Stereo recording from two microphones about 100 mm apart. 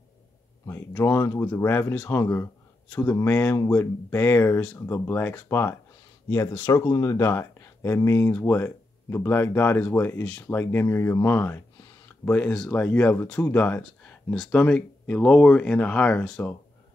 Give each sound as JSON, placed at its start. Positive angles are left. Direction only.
{"t": 1.0, "sound": "speech", "side_deg": 30}
{"t": 6.7, "sound": "speech", "side_deg": 40}
{"t": 11.2, "sound": "a sound", "side_deg": 20}
{"t": 12.3, "sound": "speech", "side_deg": 15}
{"t": 14.3, "sound": "speech", "side_deg": 0}
{"t": 14.6, "sound": "speech", "side_deg": 10}